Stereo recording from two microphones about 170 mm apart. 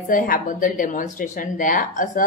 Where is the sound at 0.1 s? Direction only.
50° left (ahead or behind).